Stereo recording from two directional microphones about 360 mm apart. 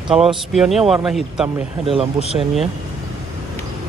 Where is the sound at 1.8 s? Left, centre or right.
Centre.